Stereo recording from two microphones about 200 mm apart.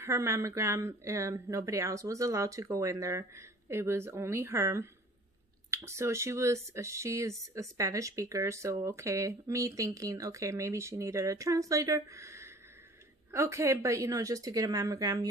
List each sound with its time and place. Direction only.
0.0 s speech: 15° right (ahead or behind)